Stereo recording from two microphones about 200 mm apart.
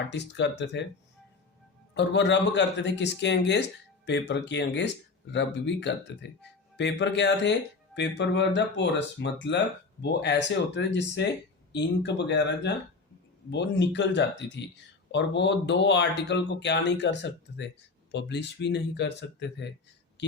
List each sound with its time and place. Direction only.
0.1 s a man's voice: 60° left (ahead or behind)
2.0 s a man's voice: 65° left (ahead or behind)